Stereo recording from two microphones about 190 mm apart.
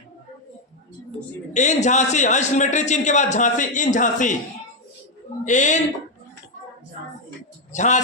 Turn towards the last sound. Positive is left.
turn(degrees=40)  # may be behind; listen again after turning